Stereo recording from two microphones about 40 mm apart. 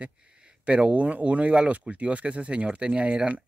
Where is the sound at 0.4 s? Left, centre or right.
Right.